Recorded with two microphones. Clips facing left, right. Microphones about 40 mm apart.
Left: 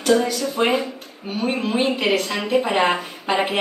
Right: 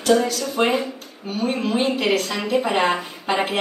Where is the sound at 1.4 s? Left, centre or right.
Left.